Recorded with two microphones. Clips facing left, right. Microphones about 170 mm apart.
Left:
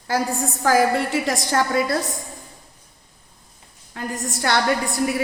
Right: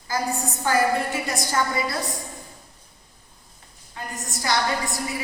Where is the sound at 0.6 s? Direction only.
90° left.